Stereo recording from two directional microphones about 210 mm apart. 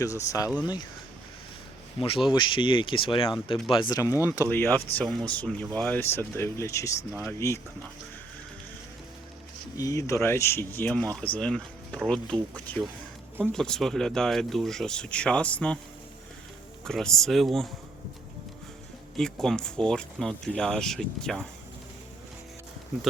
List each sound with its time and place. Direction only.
0.0 s speech: 15° left (ahead or behind)
2.0 s speech: 25° left (ahead or behind)
9.7 s speech: 15° left (ahead or behind)
16.8 s speech: 5° left (ahead or behind)
19.1 s speech: centre (ahead or behind)